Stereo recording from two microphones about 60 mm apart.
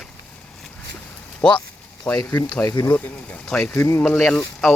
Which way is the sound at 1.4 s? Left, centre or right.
Centre.